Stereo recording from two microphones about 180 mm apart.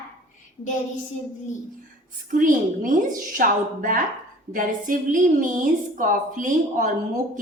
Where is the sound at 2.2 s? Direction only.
45° right (ahead or behind).